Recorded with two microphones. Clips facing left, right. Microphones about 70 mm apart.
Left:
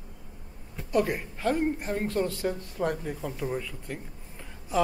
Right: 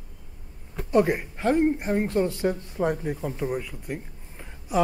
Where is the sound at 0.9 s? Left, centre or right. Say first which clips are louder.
Right 5 dB; right.